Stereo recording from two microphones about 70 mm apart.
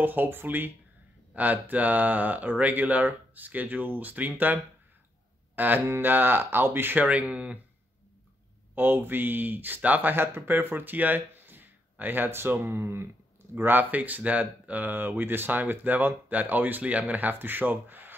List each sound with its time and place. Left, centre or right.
0.0 s speech: right
5.6 s speech: right
7.1 s speech: centre
8.7 s speech: right